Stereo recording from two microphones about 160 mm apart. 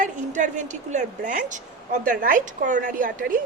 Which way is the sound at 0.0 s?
50° right (ahead or behind).